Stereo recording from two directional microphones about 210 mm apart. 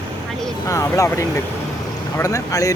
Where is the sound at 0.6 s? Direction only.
15° left (ahead or behind).